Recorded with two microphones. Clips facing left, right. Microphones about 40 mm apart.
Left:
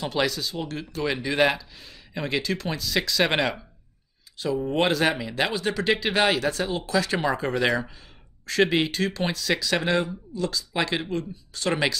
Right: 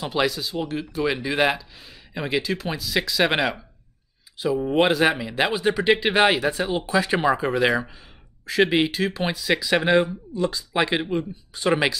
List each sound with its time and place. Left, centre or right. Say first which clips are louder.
0.0 s speech: right 2 dB; centre